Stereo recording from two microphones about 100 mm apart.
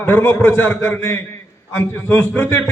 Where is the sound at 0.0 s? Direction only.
20° left (ahead or behind).